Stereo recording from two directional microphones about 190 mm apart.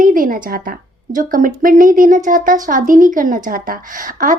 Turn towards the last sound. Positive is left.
turn(degrees=-45)  # may be behind; listen again after turning